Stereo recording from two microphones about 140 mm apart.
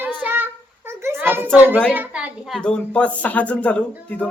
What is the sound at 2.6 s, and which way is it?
Speech, 5° left (ahead or behind).